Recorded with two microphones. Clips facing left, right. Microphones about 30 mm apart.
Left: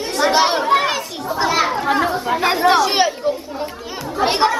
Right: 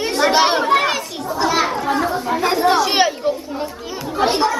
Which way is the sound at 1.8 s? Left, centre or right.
Left.